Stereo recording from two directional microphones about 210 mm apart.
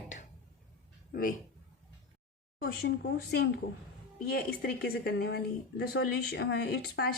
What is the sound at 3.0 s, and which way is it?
Speech, 50° left (ahead or behind).